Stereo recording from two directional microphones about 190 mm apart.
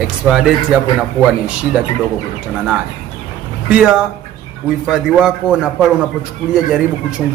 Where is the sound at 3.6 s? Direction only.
5° right (ahead or behind).